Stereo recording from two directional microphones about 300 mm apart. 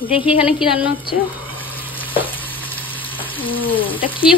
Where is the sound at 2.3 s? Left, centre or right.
Centre.